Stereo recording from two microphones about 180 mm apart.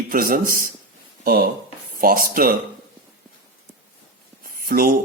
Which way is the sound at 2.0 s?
55° right (ahead or behind).